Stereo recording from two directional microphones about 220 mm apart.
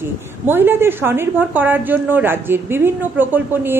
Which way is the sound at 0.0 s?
10° right (ahead or behind).